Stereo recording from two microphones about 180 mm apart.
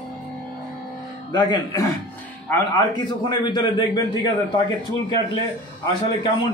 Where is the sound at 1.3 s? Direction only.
25° left (ahead or behind).